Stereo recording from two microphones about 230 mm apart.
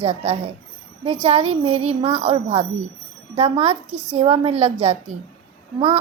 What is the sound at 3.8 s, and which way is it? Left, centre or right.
Speech, centre.